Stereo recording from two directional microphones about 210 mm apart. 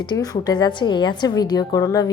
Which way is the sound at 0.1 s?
20° left (ahead or behind).